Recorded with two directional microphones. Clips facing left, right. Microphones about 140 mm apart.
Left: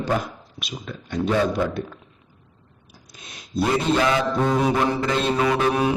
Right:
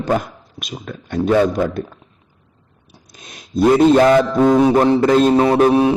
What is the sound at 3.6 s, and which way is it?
A man's voice, 45° right (ahead or behind).